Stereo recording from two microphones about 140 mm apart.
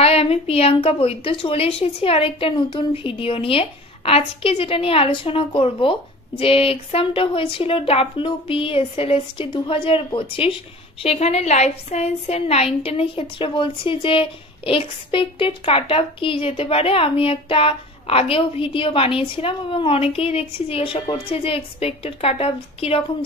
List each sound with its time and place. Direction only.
0.0 s a woman's voice: 45° left (ahead or behind)